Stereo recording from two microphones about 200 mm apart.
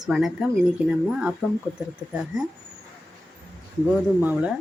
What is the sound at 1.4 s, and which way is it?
Speech, 5° right (ahead or behind).